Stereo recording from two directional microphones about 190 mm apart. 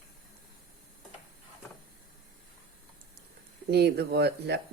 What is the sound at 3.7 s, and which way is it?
Speech, 60° right (ahead or behind).